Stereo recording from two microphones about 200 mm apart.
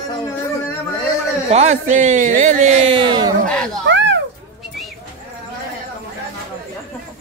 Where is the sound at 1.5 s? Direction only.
35° right (ahead or behind).